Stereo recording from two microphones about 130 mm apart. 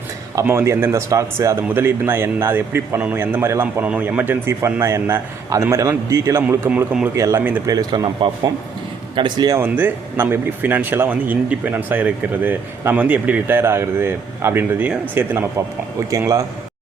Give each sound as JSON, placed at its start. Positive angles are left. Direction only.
{"t": 0.4, "sound": "a man's voice", "side_deg": -20}
{"t": 7.2, "sound": "a man's voice", "side_deg": -20}
{"t": 7.7, "sound": "speech", "side_deg": -30}
{"t": 9.5, "sound": "a man's voice", "side_deg": -15}